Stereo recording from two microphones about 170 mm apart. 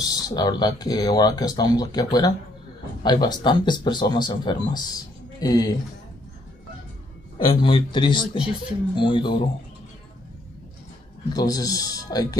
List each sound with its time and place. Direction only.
0.0 s speech: 20° left (ahead or behind)
7.3 s speech: 30° left (ahead or behind)
11.3 s speech: 20° left (ahead or behind)